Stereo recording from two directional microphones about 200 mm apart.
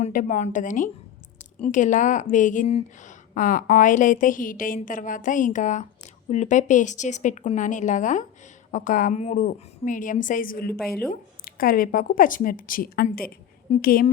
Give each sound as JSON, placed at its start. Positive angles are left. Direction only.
{"t": 0.0, "sound": "a woman's voice", "side_deg": 40}